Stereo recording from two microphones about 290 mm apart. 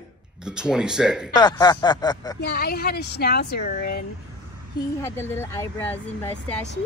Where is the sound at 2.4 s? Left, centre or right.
Left.